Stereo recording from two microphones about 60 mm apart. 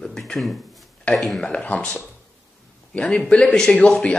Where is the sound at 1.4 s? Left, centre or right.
Left.